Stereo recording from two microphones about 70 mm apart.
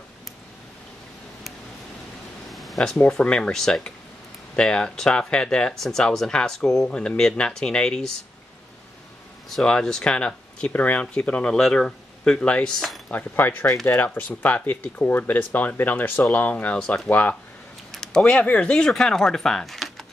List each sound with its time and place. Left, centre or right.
2.5 s a sound: centre
3.1 s speech: centre
9.5 s speech: centre
13.1 s speech: left
17.9 s a sound: centre
18.4 s speech: centre